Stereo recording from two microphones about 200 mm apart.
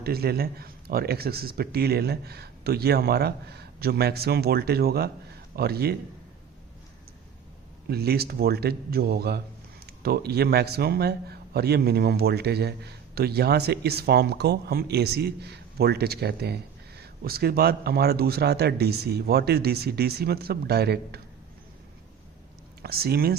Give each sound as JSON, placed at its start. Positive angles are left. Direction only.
{"t": 0.0, "sound": "speech", "side_deg": -50}
{"t": 7.9, "sound": "speech", "side_deg": -50}
{"t": 22.8, "sound": "speech", "side_deg": -50}